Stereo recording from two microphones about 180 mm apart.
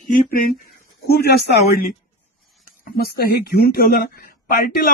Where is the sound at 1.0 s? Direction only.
65° left (ahead or behind).